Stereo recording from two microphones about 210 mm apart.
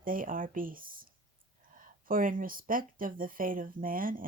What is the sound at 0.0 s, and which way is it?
Speech, 40° right (ahead or behind).